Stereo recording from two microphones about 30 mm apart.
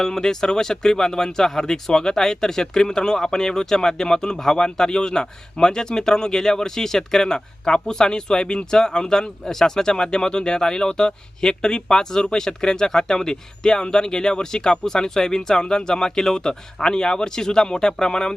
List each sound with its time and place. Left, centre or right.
0.0 s speech: centre